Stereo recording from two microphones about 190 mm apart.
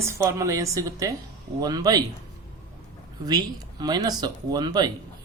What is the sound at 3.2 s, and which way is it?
Speech, 20° right (ahead or behind).